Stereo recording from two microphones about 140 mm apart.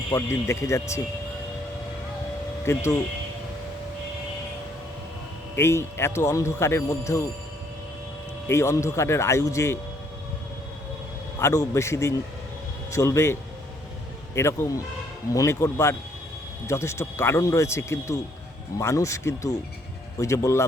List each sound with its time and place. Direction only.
0.1 s speech: 20° left (ahead or behind)
2.7 s speech: 20° left (ahead or behind)
5.5 s speech: 20° left (ahead or behind)
8.4 s speech: 20° left (ahead or behind)
11.3 s speech: 20° left (ahead or behind)
14.3 s speech: 20° left (ahead or behind)